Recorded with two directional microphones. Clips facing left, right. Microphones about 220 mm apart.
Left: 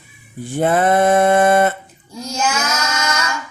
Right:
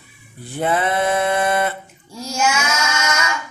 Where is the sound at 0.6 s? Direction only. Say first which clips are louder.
Left 5 dB; 45° left (ahead or behind).